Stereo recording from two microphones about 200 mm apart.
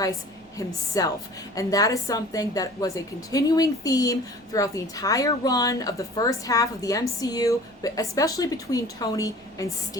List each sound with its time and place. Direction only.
0.5 s a woman's voice: 20° left (ahead or behind)